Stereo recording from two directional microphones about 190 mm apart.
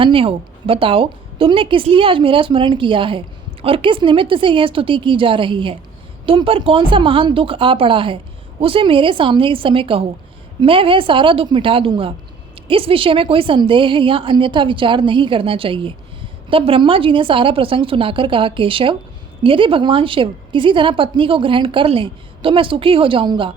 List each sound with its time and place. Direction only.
0.0 s a woman's voice: 30° right (ahead or behind)